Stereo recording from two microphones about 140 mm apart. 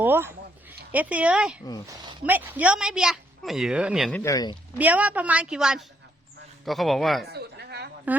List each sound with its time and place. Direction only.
0.0 s speech: 15° right (ahead or behind)
1.9 s speech: 30° right (ahead or behind)
2.2 s speech: 15° right (ahead or behind)
4.1 s speech: 20° left (ahead or behind)
4.8 s a woman's voice: 10° right (ahead or behind)
8.1 s a woman's voice: 10° right (ahead or behind)